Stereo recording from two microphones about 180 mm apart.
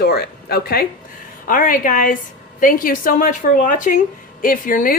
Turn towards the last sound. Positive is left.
turn(degrees=50)  # may be behind; listen again after turning